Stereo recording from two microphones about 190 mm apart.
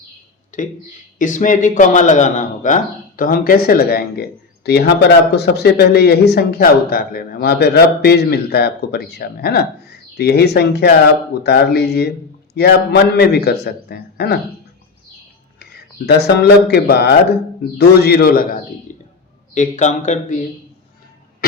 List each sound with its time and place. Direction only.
0.5 s a man's voice: 40° left (ahead or behind); by 14.3 s 55° left (ahead or behind)
15.5 s a man's voice: 55° left (ahead or behind)
18.9 s a sound: 40° left (ahead or behind)
19.5 s a man's voice: 40° left (ahead or behind)